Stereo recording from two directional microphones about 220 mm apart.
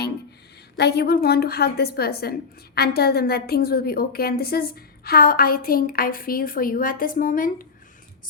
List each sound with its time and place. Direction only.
0.8 s a woman's voice: 45° left (ahead or behind)